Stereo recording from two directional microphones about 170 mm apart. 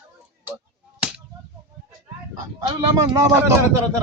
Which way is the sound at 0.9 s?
5° right (ahead or behind).